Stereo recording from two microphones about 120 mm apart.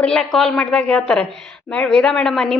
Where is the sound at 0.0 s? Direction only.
5° left (ahead or behind).